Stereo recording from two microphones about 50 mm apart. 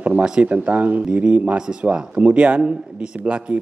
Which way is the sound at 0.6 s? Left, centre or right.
Right.